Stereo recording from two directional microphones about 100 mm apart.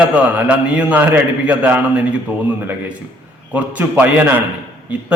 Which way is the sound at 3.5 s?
15° right (ahead or behind).